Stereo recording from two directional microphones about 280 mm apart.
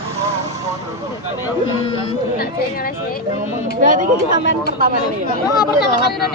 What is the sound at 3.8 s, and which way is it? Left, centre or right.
Speech, right.